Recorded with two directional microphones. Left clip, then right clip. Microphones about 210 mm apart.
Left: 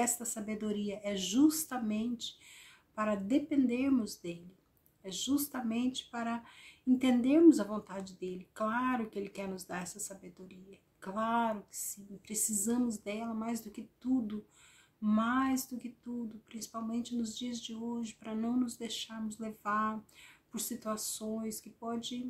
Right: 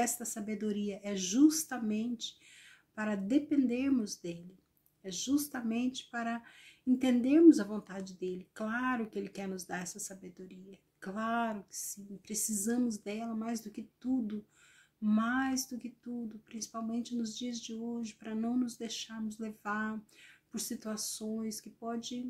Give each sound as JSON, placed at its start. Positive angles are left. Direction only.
{"t": 0.0, "sound": "speech", "side_deg": 0}
{"t": 15.0, "sound": "speech", "side_deg": 5}